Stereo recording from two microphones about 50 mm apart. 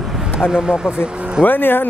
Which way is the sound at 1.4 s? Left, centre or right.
Left.